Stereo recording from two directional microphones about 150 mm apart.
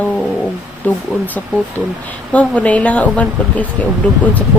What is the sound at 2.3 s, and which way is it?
Speech, 10° left (ahead or behind).